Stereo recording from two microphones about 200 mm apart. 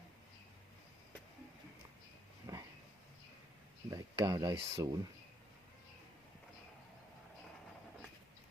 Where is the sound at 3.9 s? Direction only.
20° right (ahead or behind).